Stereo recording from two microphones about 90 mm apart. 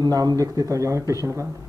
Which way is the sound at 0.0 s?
45° right (ahead or behind).